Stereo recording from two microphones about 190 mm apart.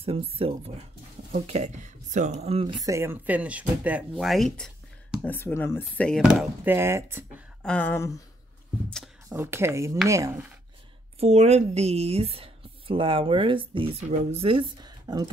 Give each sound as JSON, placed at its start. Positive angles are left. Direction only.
{"t": 0.0, "sound": "speech", "side_deg": -30}
{"t": 7.6, "sound": "a sound", "side_deg": 5}
{"t": 9.3, "sound": "speech", "side_deg": -15}
{"t": 11.1, "sound": "speech", "side_deg": -35}